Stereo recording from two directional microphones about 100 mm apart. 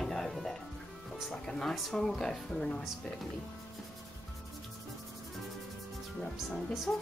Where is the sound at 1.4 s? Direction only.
5° left (ahead or behind).